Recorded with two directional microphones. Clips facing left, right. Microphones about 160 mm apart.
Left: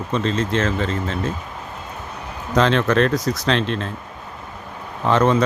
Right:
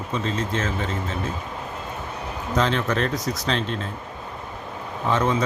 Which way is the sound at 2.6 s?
90° left.